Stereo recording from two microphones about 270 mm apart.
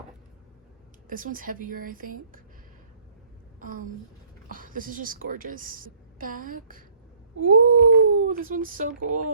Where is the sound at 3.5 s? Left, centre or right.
Right.